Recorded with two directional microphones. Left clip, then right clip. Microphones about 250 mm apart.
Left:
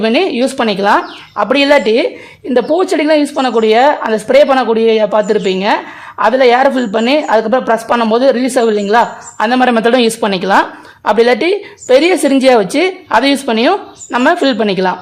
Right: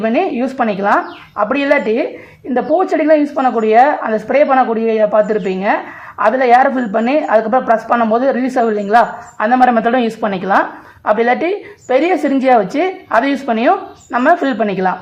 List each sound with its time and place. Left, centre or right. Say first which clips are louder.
0.0 s speech: left 3 dB; left